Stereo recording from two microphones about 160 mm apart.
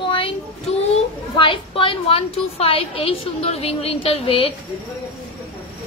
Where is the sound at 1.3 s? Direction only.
35° left (ahead or behind).